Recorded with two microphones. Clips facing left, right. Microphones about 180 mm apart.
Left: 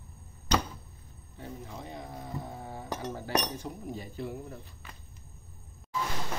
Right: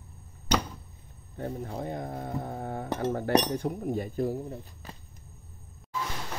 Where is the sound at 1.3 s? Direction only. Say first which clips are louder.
Right 8 dB; 55° right (ahead or behind).